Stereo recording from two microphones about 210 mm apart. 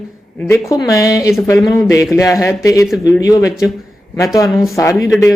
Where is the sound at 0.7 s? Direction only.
15° left (ahead or behind).